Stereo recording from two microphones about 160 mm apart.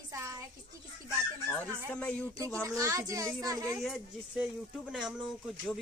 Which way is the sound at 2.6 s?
20° right (ahead or behind).